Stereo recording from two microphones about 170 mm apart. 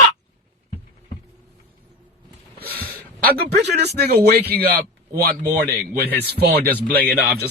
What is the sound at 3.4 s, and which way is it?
Speech, 75° right (ahead or behind).